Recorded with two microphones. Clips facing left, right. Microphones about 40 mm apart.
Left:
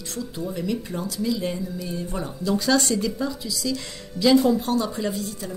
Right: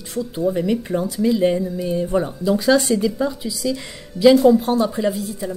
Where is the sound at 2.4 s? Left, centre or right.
Centre.